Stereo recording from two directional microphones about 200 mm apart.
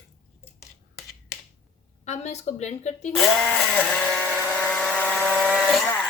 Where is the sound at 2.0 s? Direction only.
35° left (ahead or behind).